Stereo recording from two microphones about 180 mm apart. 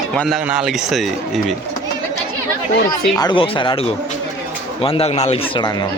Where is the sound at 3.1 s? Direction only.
25° left (ahead or behind).